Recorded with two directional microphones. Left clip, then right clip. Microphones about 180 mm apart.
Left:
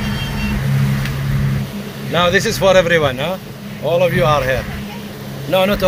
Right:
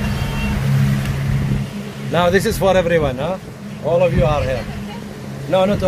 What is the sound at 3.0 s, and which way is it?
Speech, centre (ahead or behind).